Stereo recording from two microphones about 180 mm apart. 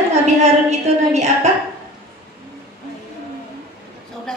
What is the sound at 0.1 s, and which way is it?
A woman's voice, 40° right (ahead or behind).